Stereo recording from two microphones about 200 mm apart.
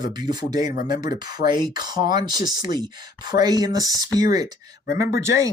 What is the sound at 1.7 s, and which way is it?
Speech, 20° right (ahead or behind).